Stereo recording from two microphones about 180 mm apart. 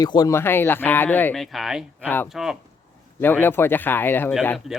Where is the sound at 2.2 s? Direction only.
Centre (ahead or behind).